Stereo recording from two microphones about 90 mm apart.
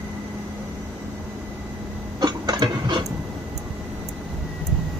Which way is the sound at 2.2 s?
50° right (ahead or behind).